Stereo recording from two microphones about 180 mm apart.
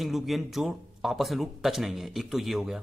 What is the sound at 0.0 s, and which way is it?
Speech, centre (ahead or behind).